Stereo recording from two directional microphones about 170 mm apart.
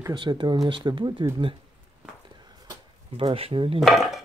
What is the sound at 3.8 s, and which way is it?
Speech, centre (ahead or behind).